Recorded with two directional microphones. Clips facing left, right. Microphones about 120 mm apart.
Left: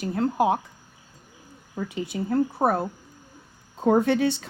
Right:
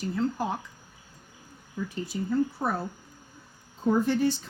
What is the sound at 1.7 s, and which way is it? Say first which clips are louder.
Speech: left 3 dB; 70° left (ahead or behind).